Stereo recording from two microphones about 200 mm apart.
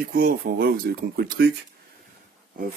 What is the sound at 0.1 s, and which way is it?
Speech, 50° right (ahead or behind).